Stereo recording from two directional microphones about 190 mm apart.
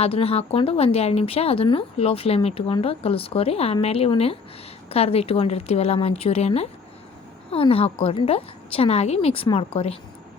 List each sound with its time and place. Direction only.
0.0 s speech: 30° left (ahead or behind)